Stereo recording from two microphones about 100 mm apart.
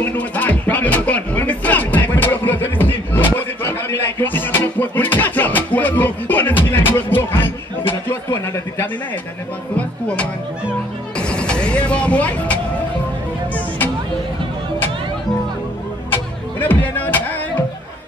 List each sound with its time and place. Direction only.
0.0 s music: 20° left (ahead or behind)
11.1 s music: 10° left (ahead or behind)
16.1 s music: 20° left (ahead or behind)